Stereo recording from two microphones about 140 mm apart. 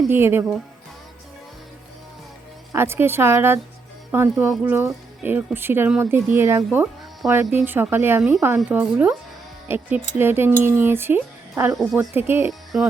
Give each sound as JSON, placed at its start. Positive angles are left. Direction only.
{"t": 0.1, "sound": "speech", "side_deg": -15}
{"t": 2.7, "sound": "speech", "side_deg": -15}
{"t": 12.5, "sound": "speech", "side_deg": 0}